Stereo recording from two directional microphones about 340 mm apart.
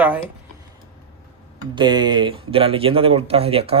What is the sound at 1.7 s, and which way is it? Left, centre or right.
Speech, centre.